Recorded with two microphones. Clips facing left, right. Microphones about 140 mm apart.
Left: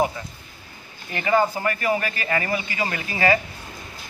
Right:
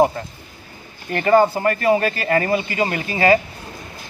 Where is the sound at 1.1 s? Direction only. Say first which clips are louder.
Right 6 dB; 45° right (ahead or behind).